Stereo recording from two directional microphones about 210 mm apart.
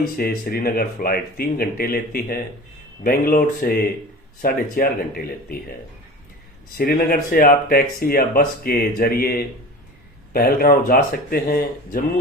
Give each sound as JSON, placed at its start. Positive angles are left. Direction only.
{"t": 0.0, "sound": "speech", "side_deg": 45}
{"t": 6.7, "sound": "speech", "side_deg": 45}